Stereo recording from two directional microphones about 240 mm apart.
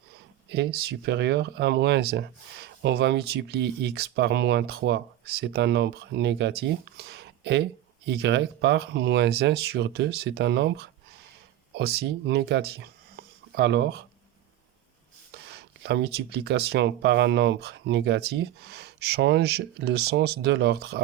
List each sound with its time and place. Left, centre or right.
0.5 s speech: right
15.4 s speech: right